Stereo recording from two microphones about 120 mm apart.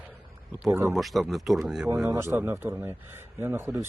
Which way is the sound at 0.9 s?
Centre (ahead or behind).